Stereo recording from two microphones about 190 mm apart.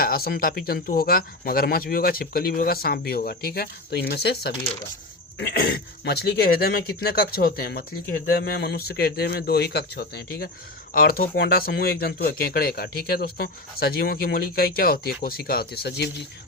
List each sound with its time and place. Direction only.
0.0 s a man's voice: 50° left (ahead or behind)